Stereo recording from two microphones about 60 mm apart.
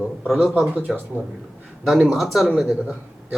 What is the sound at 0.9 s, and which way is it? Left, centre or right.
Speech, centre.